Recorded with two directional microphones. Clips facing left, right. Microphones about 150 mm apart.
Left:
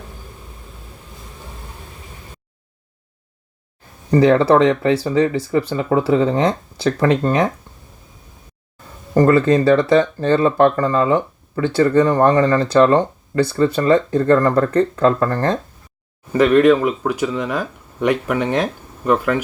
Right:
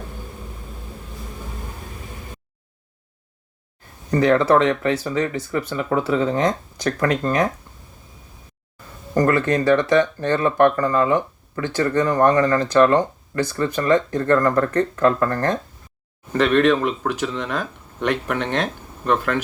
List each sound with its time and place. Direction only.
4.1 s speech: 30° left (ahead or behind)
9.1 s speech: 25° left (ahead or behind)
16.3 s speech: 10° left (ahead or behind)